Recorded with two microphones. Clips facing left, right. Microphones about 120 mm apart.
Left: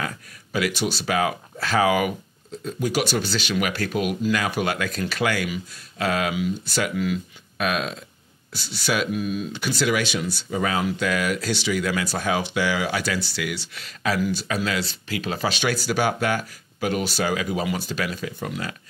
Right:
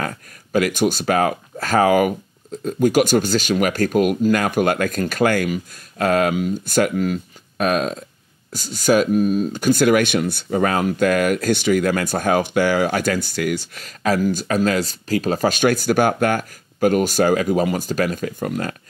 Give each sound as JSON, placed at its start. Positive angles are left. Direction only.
{"t": 0.0, "sound": "speech", "side_deg": -45}